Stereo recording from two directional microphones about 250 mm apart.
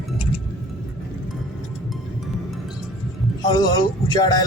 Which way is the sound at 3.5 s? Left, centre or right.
Centre.